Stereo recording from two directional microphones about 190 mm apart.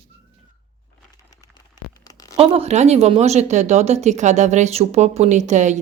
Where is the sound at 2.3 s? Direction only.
30° right (ahead or behind).